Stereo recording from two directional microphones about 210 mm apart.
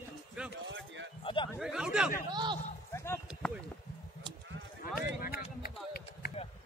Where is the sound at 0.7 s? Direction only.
60° right (ahead or behind).